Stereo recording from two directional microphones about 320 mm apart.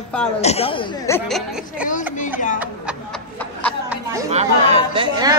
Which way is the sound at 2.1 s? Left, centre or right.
Left.